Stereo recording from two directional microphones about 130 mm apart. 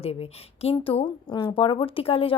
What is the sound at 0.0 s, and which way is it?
A woman's voice, 50° left (ahead or behind).